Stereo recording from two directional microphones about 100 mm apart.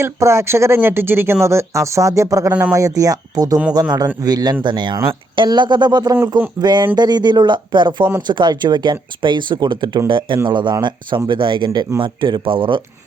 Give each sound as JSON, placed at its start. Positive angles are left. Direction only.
{"t": 0.0, "sound": "speech", "side_deg": -30}
{"t": 2.5, "sound": "speech", "side_deg": -15}
{"t": 2.7, "sound": "speech", "side_deg": -35}